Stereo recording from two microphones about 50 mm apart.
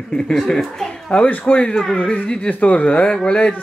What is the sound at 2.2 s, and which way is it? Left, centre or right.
Speech, centre.